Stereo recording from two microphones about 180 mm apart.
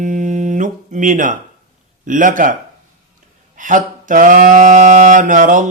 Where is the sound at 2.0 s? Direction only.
45° right (ahead or behind).